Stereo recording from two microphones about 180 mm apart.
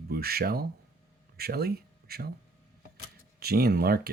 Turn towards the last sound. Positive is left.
turn(degrees=-55)  # may be behind; listen again after turning